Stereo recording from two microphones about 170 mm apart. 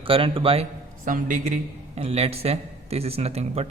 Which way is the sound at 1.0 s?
50° right (ahead or behind).